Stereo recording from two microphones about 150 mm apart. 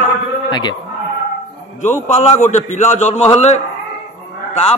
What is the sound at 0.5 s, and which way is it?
Speech, 30° left (ahead or behind).